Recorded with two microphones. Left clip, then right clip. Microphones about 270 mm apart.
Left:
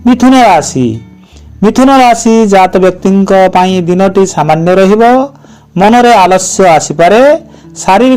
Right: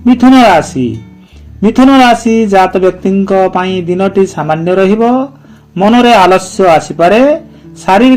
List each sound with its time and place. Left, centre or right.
0.0 s speech: left